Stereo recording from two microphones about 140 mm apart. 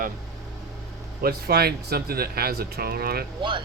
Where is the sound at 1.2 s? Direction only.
90° right.